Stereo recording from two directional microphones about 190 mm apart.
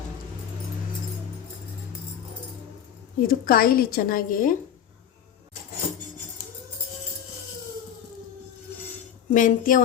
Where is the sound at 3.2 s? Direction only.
50° left (ahead or behind).